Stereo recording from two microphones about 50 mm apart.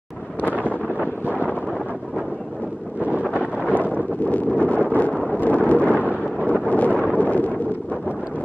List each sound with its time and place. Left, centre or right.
0.5 s wind noise: right
3.0 s wind noise: right
3.8 s wind noise: left
5.2 s a sound: left
6.4 s wind noise: left